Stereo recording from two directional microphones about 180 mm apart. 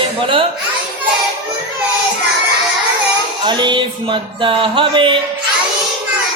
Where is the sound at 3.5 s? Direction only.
25° right (ahead or behind).